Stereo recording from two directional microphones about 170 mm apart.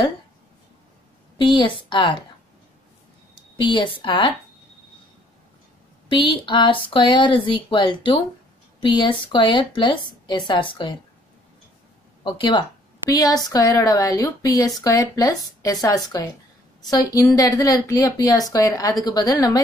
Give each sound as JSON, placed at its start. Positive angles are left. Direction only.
{"t": 1.4, "sound": "a woman's voice", "side_deg": 30}
{"t": 3.5, "sound": "a woman's voice", "side_deg": 30}
{"t": 6.0, "sound": "a woman's voice", "side_deg": 30}
{"t": 12.2, "sound": "a woman's voice", "side_deg": 30}